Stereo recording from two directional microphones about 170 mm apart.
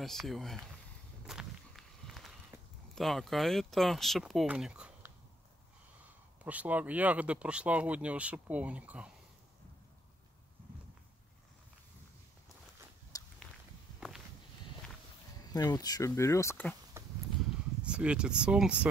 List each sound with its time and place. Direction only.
0.0 s speech: centre (ahead or behind)
1.2 s walk: 5° right (ahead or behind)
2.9 s speech: centre (ahead or behind)
6.4 s speech: 10° right (ahead or behind)
13.1 s a sound: 20° left (ahead or behind)
13.9 s walk: centre (ahead or behind)
15.4 s speech: 25° left (ahead or behind)
17.0 s a sound: 15° right (ahead or behind)
17.8 s speech: 5° right (ahead or behind)